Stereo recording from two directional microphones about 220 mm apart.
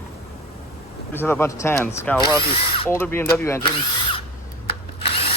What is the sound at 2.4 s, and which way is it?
Speech, 25° left (ahead or behind).